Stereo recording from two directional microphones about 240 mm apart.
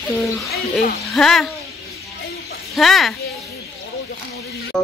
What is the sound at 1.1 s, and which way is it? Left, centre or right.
Speech, centre.